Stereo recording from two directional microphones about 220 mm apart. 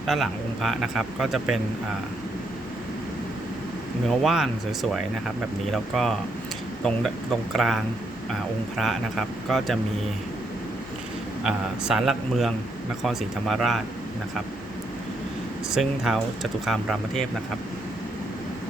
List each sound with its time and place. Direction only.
0.1 s speech: centre (ahead or behind)
4.2 s speech: centre (ahead or behind)
7.5 s speech: centre (ahead or behind)
11.4 s speech: 5° right (ahead or behind)
15.7 s speech: centre (ahead or behind)